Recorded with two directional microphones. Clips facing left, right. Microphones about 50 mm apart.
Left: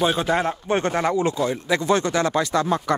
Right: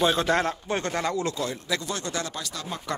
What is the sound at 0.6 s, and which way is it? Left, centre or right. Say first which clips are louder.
Speech: left 6 dB; left.